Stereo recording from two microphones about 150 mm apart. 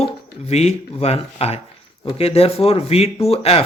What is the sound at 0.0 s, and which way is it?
A man's voice, 45° left (ahead or behind).